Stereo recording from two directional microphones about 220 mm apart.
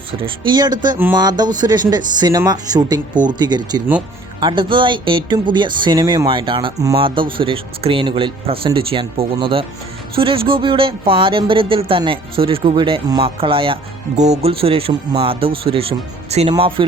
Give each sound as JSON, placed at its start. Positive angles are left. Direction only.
{"t": 0.3, "sound": "speech", "side_deg": -20}